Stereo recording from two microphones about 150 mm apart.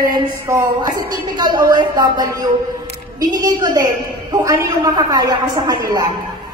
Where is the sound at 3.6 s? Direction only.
25° right (ahead or behind).